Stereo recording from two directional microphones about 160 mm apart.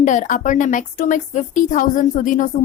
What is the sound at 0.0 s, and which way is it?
Speech, 50° left (ahead or behind).